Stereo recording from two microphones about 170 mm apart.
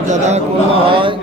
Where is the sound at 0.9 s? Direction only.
30° right (ahead or behind).